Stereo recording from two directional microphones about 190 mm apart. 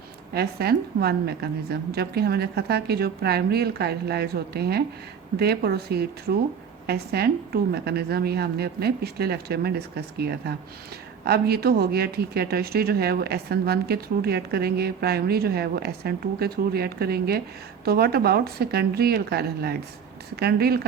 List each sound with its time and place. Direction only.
0.3 s speech: 55° right (ahead or behind)